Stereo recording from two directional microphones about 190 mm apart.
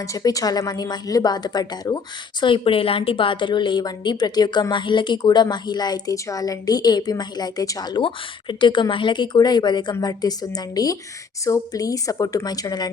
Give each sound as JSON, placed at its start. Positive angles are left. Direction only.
{"t": 0.0, "sound": "a woman's voice", "side_deg": 20}